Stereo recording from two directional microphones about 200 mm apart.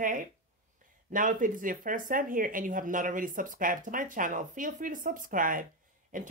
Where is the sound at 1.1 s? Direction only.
40° right (ahead or behind).